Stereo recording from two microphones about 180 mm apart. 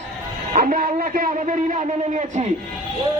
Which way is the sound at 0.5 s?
50° right (ahead or behind).